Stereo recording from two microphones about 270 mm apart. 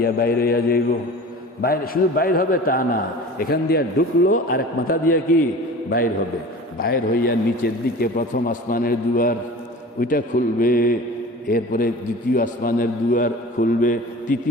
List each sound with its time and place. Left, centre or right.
0.0 s a man's voice: left
6.7 s a man's voice: left